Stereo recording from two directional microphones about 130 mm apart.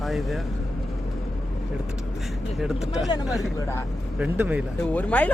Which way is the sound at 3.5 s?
20° left (ahead or behind).